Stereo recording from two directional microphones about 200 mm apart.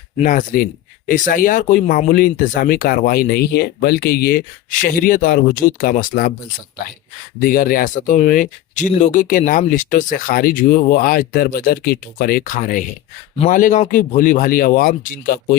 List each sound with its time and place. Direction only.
0.2 s speech: 40° left (ahead or behind)
7.4 s speech: 45° left (ahead or behind)